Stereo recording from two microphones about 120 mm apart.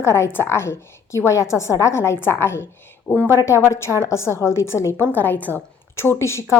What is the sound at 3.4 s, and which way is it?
A woman's voice, 25° left (ahead or behind).